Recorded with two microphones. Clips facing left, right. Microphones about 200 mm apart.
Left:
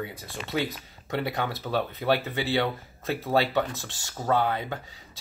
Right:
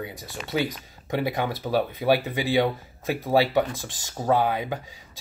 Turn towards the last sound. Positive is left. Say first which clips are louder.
# right 3 dB
turn(degrees=-10)  # may be behind; listen again after turning